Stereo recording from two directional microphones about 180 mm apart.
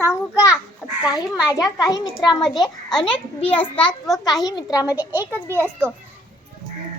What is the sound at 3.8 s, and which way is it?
A child's voice, 25° left (ahead or behind).